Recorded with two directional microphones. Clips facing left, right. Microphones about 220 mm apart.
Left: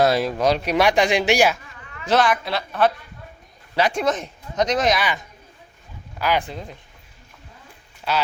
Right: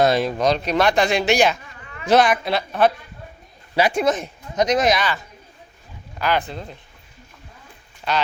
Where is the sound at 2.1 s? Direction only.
15° right (ahead or behind).